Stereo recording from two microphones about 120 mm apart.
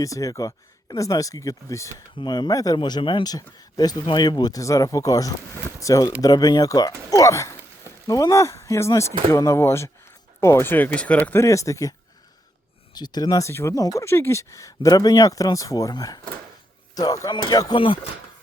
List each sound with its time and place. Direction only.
0.0 s speech: 30° left (ahead or behind)
2.1 s speech: 40° left (ahead or behind)
3.3 s speech: 35° left (ahead or behind); by 11.4 s 15° left (ahead or behind)
11.4 s speech: 25° left (ahead or behind); by 18.0 s 40° left (ahead or behind)